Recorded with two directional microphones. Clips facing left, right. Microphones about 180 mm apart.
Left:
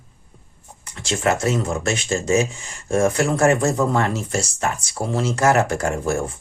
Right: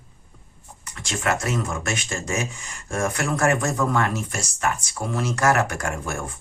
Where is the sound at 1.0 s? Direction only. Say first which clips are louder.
Left 5 dB; 30° left (ahead or behind).